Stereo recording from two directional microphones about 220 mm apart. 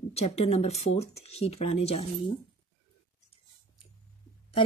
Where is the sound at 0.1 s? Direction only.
30° left (ahead or behind).